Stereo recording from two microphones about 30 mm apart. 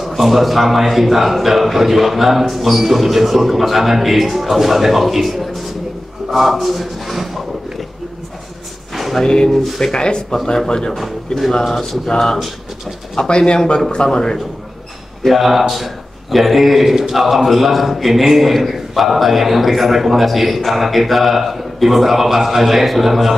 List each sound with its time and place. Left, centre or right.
0.0 s a man's voice: centre
9.1 s speech: centre
9.5 s speech: centre
9.9 s speech: left
11.0 s a man's voice: centre
12.1 s speech: centre
13.2 s speech: left
15.2 s a man's voice: centre